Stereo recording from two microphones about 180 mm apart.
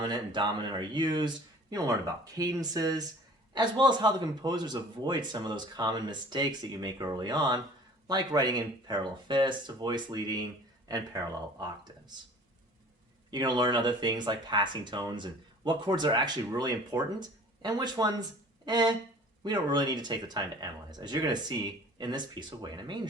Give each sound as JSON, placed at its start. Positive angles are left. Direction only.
{"t": 0.0, "sound": "speech", "side_deg": -25}
{"t": 13.3, "sound": "speech", "side_deg": -25}